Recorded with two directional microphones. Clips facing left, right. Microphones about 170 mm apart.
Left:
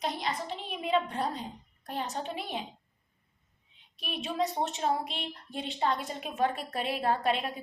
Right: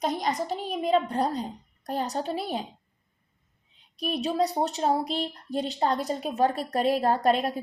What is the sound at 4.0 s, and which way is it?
A child's voice, 40° right (ahead or behind).